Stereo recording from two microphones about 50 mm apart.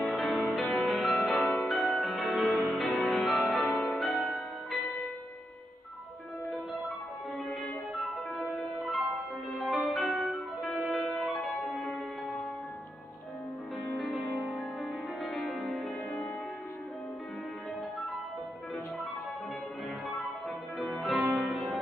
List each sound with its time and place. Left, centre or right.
0.0 s music: centre
2.2 s music: centre
7.9 s music: centre
14.0 s music: centre
14.4 s music: centre
15.2 s music: centre
20.2 s music: centre